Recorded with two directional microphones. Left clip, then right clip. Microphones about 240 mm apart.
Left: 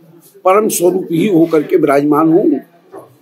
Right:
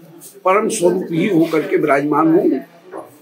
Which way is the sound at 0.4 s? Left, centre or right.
Left.